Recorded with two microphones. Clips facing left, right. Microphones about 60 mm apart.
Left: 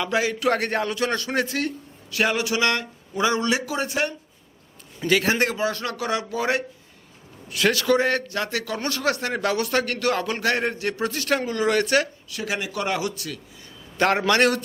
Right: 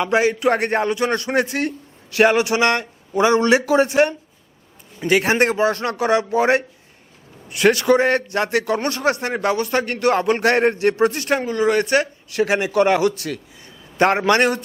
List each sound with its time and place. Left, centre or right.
0.0 s a man's voice: right
3.3 s speech: right
5.0 s a man's voice: right
5.4 s a man's voice: right
7.6 s a man's voice: right
9.6 s speech: centre
9.8 s a man's voice: right
12.4 s speech: right
14.3 s speech: centre